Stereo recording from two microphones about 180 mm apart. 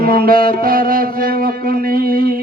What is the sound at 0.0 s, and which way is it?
Music, 55° right (ahead or behind).